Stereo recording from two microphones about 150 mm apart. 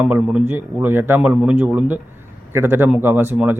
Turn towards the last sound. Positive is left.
turn(degrees=-10)  # may be behind; listen again after turning